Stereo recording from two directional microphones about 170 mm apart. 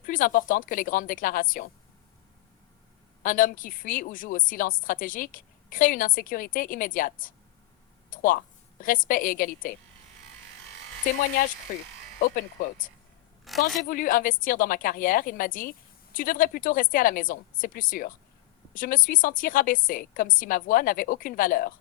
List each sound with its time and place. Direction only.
0.0 s a woman's voice: 55° left (ahead or behind)
3.2 s a woman's voice: 55° left (ahead or behind)
13.4 s a sound: centre (ahead or behind)
13.8 s a woman's voice: 55° left (ahead or behind)